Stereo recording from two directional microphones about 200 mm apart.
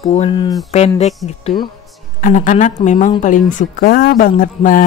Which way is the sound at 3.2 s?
40° left (ahead or behind).